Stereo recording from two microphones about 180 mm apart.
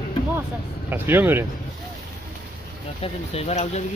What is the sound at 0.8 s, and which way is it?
Speech, 10° right (ahead or behind).